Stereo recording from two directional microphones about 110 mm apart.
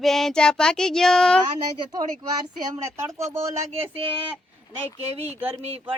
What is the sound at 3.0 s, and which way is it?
Speech, 25° right (ahead or behind).